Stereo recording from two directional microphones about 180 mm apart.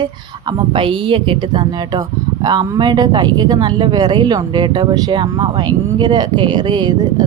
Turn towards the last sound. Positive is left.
turn(degrees=-25)  # may be behind; listen again after turning